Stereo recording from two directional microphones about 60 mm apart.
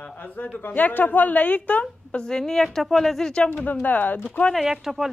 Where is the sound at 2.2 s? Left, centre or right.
Centre.